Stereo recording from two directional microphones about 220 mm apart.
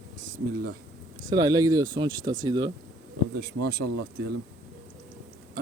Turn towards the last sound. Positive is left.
turn(degrees=-45)  # may be behind; listen again after turning